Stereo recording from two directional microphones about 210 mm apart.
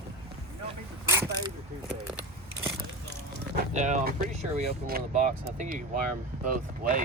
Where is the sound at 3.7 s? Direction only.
35° right (ahead or behind).